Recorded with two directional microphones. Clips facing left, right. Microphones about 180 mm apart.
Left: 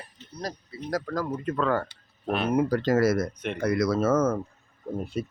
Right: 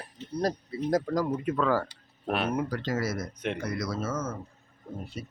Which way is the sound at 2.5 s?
35° left (ahead or behind).